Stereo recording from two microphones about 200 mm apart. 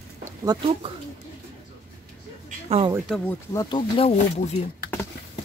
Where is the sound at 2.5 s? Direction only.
30° right (ahead or behind).